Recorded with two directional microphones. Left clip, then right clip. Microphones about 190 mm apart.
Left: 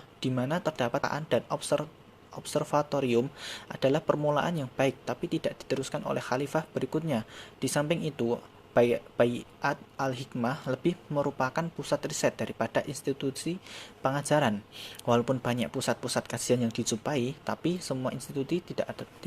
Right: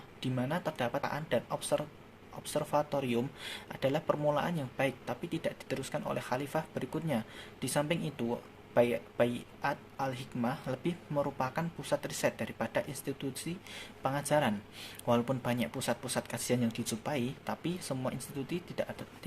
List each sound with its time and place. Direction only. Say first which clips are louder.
0.2 s speech: left 5 dB; 30° left (ahead or behind)